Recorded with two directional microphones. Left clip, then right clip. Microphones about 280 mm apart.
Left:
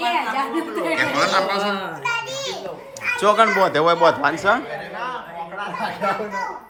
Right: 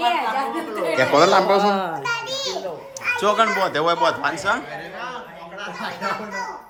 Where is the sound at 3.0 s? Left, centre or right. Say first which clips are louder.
Left 2 dB; centre.